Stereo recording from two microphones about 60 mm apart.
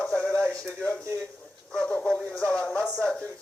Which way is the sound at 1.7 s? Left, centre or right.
Centre.